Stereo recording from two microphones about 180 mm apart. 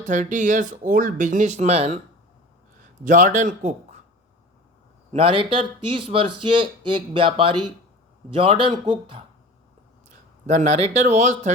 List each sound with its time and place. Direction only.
0.0 s speech: 45° right (ahead or behind)
3.0 s speech: 45° right (ahead or behind)
5.1 s speech: 30° right (ahead or behind)
10.1 s speech: 40° right (ahead or behind)